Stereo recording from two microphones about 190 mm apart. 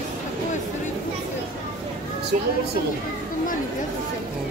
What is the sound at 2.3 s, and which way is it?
Speech, 45° right (ahead or behind).